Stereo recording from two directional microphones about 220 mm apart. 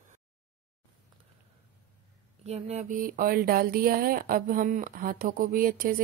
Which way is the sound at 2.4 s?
30° right (ahead or behind).